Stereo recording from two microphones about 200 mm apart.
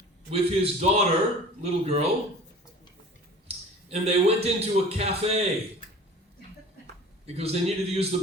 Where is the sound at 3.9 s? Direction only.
30° right (ahead or behind).